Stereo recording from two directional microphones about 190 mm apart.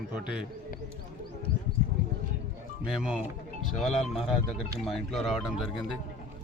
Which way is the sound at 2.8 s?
5° right (ahead or behind).